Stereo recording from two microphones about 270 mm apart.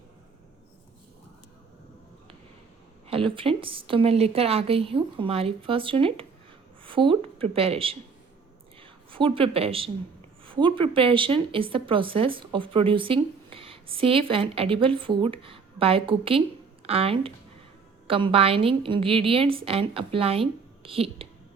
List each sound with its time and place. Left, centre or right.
3.1 s a woman's voice: centre